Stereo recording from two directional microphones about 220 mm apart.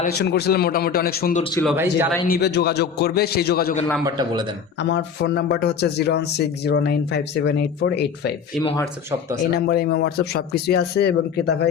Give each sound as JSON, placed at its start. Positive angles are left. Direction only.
{"t": 0.0, "sound": "a man's voice", "side_deg": 50}
{"t": 1.6, "sound": "speech", "side_deg": -10}
{"t": 2.2, "sound": "a man's voice", "side_deg": 45}
{"t": 4.0, "sound": "a man's voice", "side_deg": -20}
{"t": 4.8, "sound": "a man's voice", "side_deg": 50}
{"t": 9.6, "sound": "a man's voice", "side_deg": 45}